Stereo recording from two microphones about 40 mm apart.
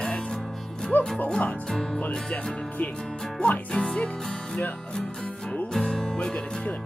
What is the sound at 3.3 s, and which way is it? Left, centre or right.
Music, left.